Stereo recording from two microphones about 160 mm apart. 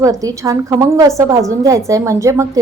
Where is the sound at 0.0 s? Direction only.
20° right (ahead or behind).